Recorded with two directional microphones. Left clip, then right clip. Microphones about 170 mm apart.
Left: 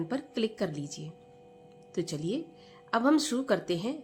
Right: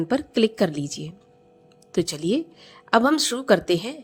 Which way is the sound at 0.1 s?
45° right (ahead or behind).